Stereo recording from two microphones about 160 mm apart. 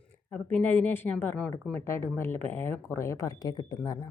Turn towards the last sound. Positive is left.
turn(degrees=20)  # may be behind; listen again after turning